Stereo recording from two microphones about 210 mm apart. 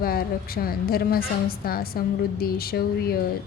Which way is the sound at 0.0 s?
45° left (ahead or behind).